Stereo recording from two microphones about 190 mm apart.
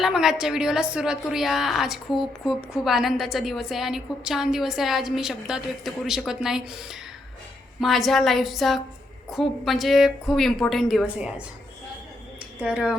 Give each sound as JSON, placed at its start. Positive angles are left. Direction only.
{"t": 0.0, "sound": "a woman's voice", "side_deg": 0}
{"t": 12.5, "sound": "speech", "side_deg": -5}